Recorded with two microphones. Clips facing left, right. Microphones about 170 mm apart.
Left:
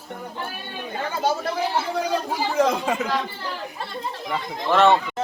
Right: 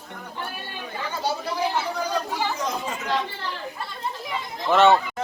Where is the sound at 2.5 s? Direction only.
60° left (ahead or behind).